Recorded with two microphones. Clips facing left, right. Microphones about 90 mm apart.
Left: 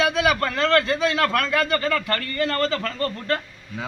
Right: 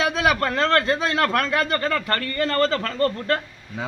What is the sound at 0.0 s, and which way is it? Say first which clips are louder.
A man's voice: even; 35° right (ahead or behind).